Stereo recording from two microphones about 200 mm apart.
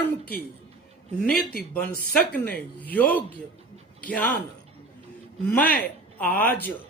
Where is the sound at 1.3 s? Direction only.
50° left (ahead or behind).